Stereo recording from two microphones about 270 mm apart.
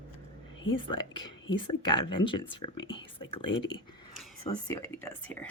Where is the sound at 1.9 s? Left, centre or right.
Centre.